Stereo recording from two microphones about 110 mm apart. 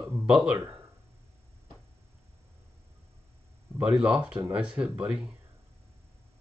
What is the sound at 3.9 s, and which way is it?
Speech, 5° right (ahead or behind).